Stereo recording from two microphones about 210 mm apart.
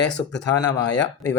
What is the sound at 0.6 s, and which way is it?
Speech, 20° left (ahead or behind).